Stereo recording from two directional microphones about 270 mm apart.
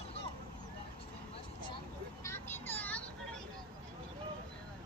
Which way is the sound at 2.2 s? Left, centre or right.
Centre.